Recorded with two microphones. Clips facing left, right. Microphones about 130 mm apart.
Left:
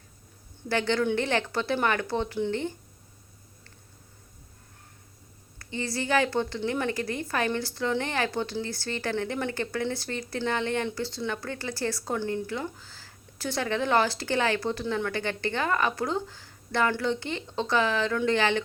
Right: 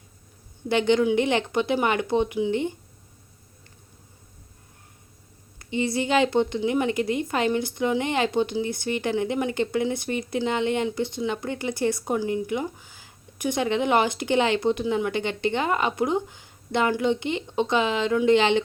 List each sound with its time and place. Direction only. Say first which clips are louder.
0.7 s speech: right 5 dB; 20° right (ahead or behind)
5.5 s speech: right 7 dB; 20° right (ahead or behind)